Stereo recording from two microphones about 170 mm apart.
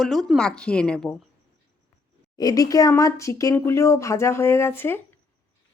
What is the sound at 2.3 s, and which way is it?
Speech, 20° left (ahead or behind).